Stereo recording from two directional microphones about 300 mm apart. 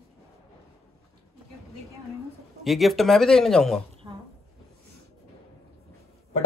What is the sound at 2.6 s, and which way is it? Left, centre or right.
Speech, centre.